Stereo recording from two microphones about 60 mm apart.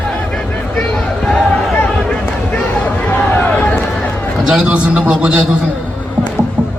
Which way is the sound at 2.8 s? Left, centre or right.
Left.